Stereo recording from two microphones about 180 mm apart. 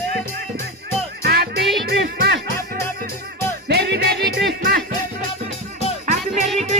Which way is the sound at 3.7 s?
70° right (ahead or behind).